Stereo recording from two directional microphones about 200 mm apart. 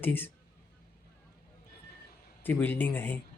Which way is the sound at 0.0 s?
10° left (ahead or behind).